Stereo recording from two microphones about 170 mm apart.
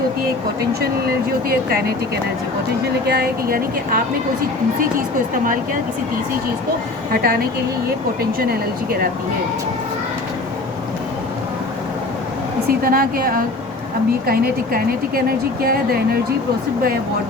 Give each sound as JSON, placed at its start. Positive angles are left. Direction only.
{"t": 0.7, "sound": "speech", "side_deg": -65}
{"t": 3.1, "sound": "speech", "side_deg": -65}
{"t": 7.1, "sound": "a woman's voice", "side_deg": -65}
{"t": 12.6, "sound": "speech", "side_deg": -60}